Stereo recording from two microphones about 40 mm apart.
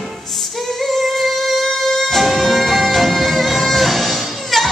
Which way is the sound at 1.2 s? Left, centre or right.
Centre.